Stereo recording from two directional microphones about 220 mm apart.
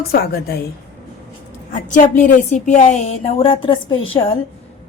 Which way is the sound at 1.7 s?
35° left (ahead or behind).